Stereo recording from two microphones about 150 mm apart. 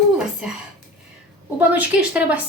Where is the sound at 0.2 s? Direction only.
5° right (ahead or behind).